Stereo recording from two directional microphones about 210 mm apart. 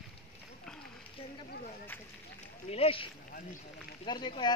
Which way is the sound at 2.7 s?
25° left (ahead or behind).